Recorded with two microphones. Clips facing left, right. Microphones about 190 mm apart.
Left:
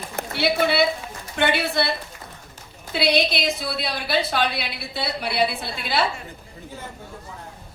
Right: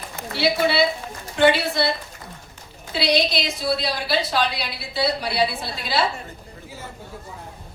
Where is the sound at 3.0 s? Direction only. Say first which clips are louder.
Even; 55° left (ahead or behind).